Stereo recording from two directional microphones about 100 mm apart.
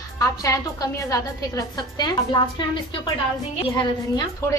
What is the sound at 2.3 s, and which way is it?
Speech, 45° left (ahead or behind).